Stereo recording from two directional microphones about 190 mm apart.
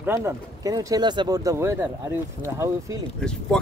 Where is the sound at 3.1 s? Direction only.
5° left (ahead or behind).